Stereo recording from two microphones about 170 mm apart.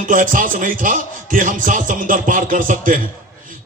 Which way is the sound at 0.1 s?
50° right (ahead or behind).